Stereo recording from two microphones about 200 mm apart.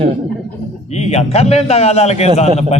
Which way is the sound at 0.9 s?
35° left (ahead or behind).